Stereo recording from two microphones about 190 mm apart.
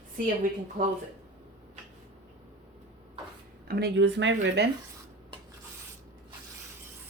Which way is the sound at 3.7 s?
60° right (ahead or behind).